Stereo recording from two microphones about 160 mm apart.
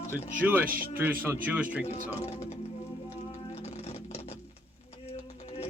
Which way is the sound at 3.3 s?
40° left (ahead or behind).